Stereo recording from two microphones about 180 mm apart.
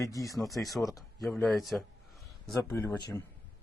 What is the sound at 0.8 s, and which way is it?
Speech, 20° left (ahead or behind).